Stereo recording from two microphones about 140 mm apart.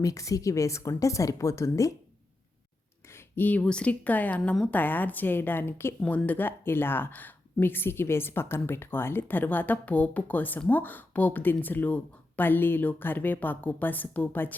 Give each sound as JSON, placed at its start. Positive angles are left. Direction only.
{"t": 0.0, "sound": "a woman's voice", "side_deg": 25}
{"t": 3.1, "sound": "speech", "side_deg": 15}